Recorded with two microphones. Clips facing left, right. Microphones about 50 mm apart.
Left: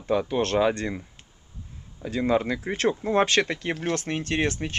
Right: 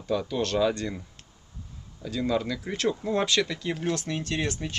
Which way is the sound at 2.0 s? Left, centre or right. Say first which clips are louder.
Left 4 dB; left.